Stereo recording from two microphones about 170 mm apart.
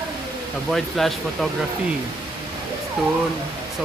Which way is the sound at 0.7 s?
Centre (ahead or behind).